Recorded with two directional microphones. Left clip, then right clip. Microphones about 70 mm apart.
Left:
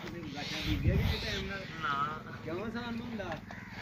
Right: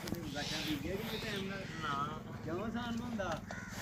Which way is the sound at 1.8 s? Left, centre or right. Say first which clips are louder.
Left 5 dB; centre.